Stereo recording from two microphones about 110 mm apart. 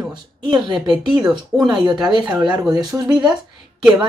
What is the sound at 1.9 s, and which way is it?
Speech, 40° right (ahead or behind).